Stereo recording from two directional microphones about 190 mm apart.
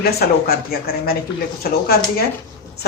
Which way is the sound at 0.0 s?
55° left (ahead or behind).